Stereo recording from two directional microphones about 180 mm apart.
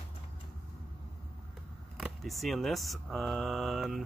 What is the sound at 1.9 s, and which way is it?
Speech, centre (ahead or behind).